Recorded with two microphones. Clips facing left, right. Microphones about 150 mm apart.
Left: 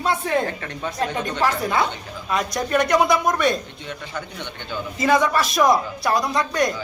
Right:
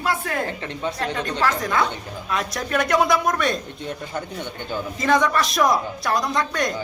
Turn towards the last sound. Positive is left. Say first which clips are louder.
# left 2 dB
turn(degrees=0)  # may be behind; listen again after turning